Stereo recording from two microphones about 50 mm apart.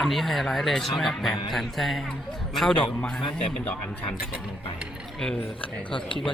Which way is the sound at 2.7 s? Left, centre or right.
Centre.